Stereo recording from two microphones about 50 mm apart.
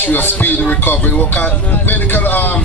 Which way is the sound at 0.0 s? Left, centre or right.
Left.